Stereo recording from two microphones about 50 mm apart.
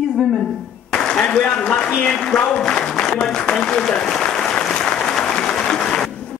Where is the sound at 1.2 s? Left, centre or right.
Centre.